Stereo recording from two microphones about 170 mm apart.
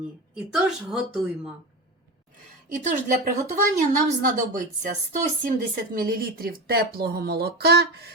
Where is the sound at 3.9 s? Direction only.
50° right (ahead or behind).